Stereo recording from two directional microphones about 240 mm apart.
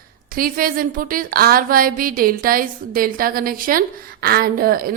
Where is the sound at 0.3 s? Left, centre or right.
Right.